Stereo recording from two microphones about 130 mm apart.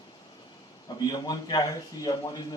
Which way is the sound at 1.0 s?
30° left (ahead or behind).